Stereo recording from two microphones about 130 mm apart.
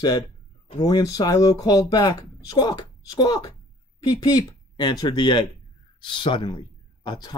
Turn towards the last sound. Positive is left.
turn(degrees=30)  # may be behind; listen again after turning